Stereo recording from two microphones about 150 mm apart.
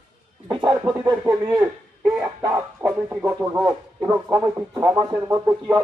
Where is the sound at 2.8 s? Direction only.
10° right (ahead or behind).